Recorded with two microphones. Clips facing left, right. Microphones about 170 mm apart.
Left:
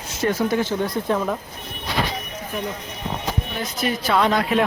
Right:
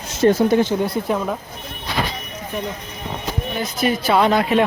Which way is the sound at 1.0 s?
5° right (ahead or behind).